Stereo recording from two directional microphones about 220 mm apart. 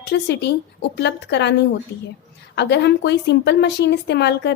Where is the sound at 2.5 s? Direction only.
50° left (ahead or behind).